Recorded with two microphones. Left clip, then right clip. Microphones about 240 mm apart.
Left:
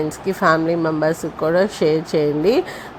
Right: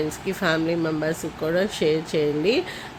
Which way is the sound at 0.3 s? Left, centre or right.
Centre.